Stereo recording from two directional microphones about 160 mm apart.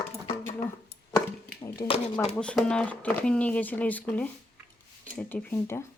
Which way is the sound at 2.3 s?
5° left (ahead or behind).